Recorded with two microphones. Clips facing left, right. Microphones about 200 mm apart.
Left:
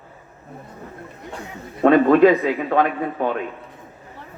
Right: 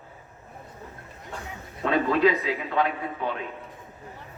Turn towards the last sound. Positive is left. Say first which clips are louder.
# left 7 dB
turn(degrees=55)  # may be behind; listen again after turning